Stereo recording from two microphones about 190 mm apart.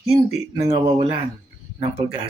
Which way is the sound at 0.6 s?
25° right (ahead or behind).